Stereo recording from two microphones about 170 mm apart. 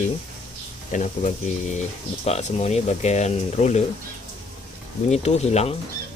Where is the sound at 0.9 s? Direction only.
45° left (ahead or behind).